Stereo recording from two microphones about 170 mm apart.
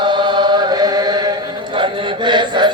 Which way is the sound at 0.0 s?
25° right (ahead or behind).